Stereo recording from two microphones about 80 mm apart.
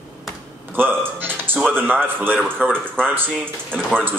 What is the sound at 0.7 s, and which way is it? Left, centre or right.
Speech, right.